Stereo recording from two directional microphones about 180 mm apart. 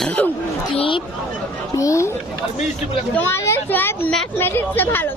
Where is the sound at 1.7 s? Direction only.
15° left (ahead or behind).